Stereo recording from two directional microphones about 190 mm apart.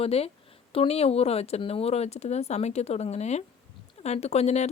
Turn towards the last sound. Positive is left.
turn(degrees=35)  # may be behind; listen again after turning